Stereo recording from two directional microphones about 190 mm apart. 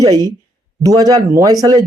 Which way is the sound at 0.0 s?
20° right (ahead or behind).